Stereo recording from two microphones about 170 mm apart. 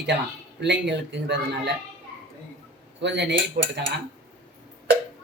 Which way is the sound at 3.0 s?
90° right.